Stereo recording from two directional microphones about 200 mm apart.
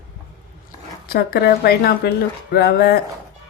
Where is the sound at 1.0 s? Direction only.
50° left (ahead or behind).